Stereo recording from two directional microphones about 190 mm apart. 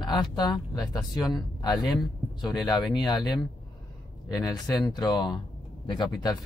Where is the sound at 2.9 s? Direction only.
20° left (ahead or behind).